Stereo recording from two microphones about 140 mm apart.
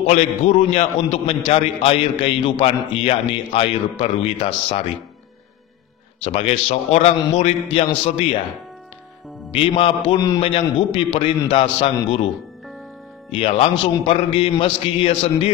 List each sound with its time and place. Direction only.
0.1 s a man's voice: 50° left (ahead or behind)
6.2 s a man's voice: 50° left (ahead or behind)
9.5 s a man's voice: 40° left (ahead or behind)
13.3 s a man's voice: 45° left (ahead or behind)